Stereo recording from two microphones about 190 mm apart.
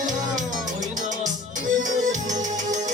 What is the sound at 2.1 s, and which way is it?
Music, 40° right (ahead or behind).